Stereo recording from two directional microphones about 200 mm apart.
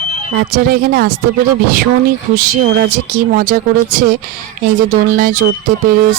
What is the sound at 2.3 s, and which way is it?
Speech, 45° right (ahead or behind).